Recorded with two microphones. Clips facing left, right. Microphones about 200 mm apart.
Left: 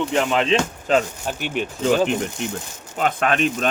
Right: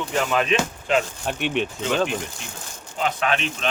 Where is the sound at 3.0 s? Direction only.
50° left (ahead or behind).